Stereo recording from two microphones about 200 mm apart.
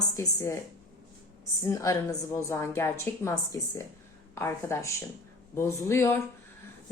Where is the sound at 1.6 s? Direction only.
15° left (ahead or behind).